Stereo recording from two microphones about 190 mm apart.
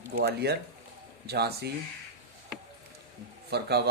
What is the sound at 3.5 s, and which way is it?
Speech, 55° right (ahead or behind).